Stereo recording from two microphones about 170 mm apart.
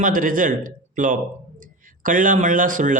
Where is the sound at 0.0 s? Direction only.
55° right (ahead or behind).